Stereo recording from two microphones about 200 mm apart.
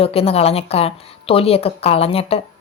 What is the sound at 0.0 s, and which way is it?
A woman's voice, 30° left (ahead or behind).